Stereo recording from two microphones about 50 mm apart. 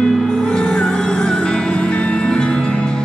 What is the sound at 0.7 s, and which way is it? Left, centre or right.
Music, centre.